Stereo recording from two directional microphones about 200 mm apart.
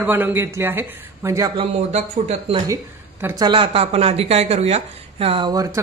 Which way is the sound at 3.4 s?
25° right (ahead or behind).